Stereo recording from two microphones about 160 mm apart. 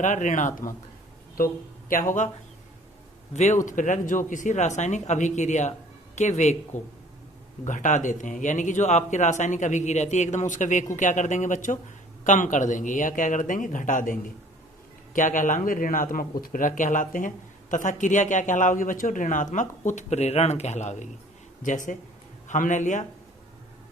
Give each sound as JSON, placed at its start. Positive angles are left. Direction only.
{"t": 0.0, "sound": "speech", "side_deg": 50}
{"t": 3.3, "sound": "speech", "side_deg": 45}
{"t": 7.6, "sound": "speech", "side_deg": 50}